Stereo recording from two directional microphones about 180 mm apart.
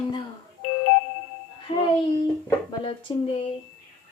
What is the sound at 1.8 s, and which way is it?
Speech, 20° left (ahead or behind).